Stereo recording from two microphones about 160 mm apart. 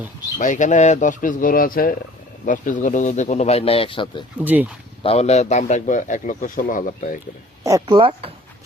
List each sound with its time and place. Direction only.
0.3 s a man's voice: 50° left (ahead or behind); by 4.2 s 30° left (ahead or behind)
4.4 s speech: 10° right (ahead or behind)
5.0 s a man's voice: 40° left (ahead or behind)
7.6 s speech: 25° right (ahead or behind)